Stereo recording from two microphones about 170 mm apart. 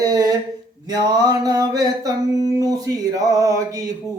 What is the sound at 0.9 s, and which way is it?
Speech, 25° right (ahead or behind).